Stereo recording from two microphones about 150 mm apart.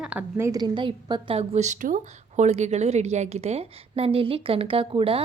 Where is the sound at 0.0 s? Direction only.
10° right (ahead or behind); by 1.4 s 30° right (ahead or behind).